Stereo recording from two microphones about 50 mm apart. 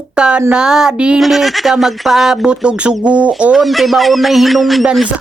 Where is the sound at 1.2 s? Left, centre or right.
Centre.